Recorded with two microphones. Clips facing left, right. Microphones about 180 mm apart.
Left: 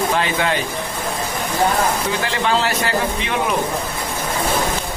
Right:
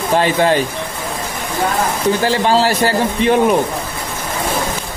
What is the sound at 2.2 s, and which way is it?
A man's voice, 35° right (ahead or behind).